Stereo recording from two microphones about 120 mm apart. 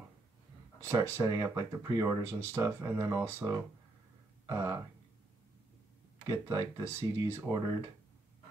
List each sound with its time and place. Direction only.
0.7 s speech: 25° right (ahead or behind)
6.2 s speech: 20° right (ahead or behind)